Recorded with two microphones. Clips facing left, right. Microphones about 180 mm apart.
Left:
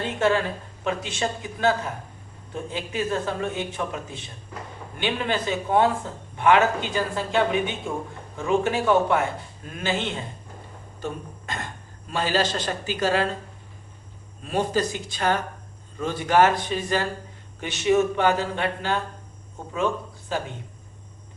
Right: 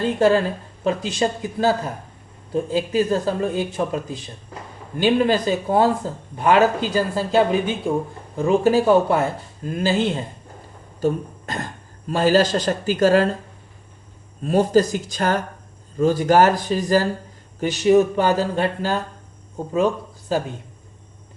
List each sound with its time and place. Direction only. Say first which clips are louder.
0.0 s speech: right 6 dB; 35° right (ahead or behind)
14.4 s speech: right 7 dB; 40° right (ahead or behind)